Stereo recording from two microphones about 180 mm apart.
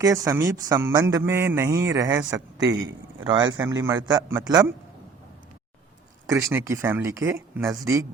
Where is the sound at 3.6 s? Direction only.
15° right (ahead or behind).